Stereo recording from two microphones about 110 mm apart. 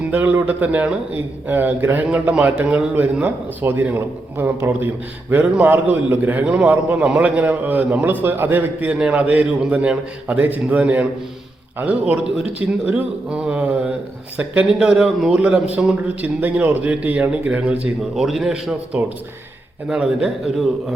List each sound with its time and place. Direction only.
0.0 s a man's voice: 15° right (ahead or behind)
19.9 s a man's voice: 5° right (ahead or behind)